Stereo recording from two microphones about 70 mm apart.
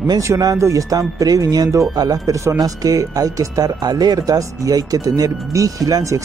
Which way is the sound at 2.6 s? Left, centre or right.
Right.